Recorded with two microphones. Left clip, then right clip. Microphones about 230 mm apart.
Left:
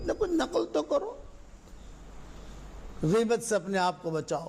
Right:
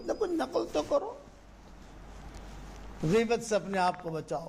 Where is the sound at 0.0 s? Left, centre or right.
Left.